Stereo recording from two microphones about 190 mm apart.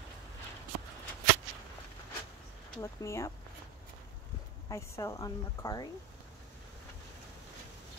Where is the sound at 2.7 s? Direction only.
15° left (ahead or behind).